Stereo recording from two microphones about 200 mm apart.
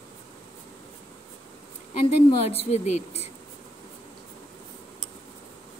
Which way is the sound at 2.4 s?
30° left (ahead or behind).